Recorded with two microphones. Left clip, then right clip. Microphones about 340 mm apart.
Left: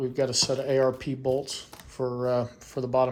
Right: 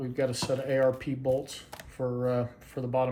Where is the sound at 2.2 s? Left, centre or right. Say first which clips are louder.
Left 4 dB; centre.